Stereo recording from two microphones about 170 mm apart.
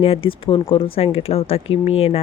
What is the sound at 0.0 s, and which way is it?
Speech, 35° left (ahead or behind).